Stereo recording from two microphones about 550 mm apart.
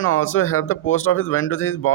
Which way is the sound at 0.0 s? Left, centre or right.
Left.